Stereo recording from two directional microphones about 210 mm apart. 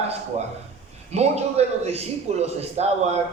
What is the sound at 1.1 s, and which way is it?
A man's voice, 30° right (ahead or behind).